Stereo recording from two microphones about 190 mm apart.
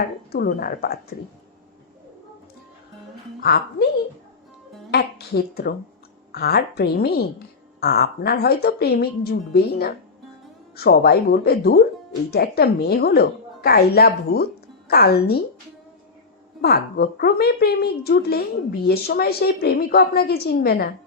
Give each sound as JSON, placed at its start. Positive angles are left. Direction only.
{"t": 0.3, "sound": "speech", "side_deg": 50}
{"t": 3.4, "sound": "a woman's voice", "side_deg": 55}
{"t": 4.9, "sound": "a woman's voice", "side_deg": 55}
{"t": 16.6, "sound": "a woman's voice", "side_deg": 55}